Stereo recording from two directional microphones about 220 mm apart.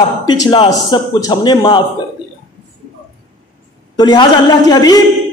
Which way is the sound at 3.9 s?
20° left (ahead or behind).